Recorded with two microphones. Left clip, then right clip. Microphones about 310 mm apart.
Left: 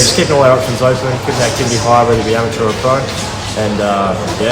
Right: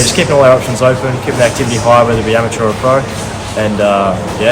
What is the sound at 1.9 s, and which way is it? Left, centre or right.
Speech, centre.